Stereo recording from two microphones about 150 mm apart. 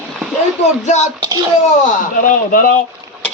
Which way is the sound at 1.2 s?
25° right (ahead or behind).